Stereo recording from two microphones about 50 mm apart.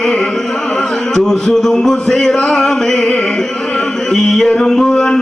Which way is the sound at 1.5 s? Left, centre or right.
Centre.